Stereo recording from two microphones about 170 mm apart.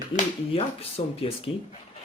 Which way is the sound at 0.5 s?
35° left (ahead or behind).